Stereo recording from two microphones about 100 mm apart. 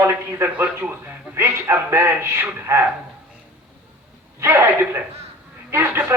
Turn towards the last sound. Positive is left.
turn(degrees=-25)  # may be behind; listen again after turning